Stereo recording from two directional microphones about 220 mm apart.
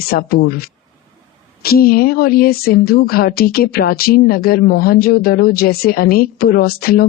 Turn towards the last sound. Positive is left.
turn(degrees=45)  # may be behind; listen again after turning